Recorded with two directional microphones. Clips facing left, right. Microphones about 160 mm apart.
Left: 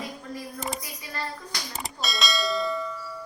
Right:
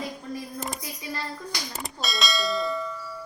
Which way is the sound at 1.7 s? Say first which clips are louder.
Left 3 dB; centre (ahead or behind).